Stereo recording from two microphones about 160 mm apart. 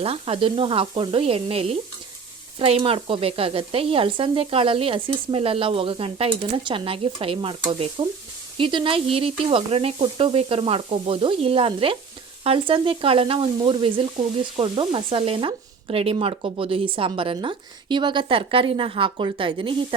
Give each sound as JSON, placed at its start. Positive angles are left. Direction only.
{"t": 0.0, "sound": "sizzle", "side_deg": -35}